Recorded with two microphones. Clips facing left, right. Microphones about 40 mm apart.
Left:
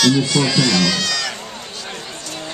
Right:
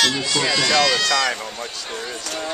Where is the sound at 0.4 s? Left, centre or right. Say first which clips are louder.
Left 1 dB; centre.